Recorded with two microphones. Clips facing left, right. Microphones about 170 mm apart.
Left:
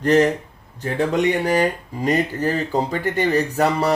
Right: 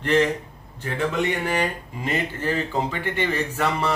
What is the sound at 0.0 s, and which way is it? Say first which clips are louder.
Speech: left 4 dB; 40° left (ahead or behind).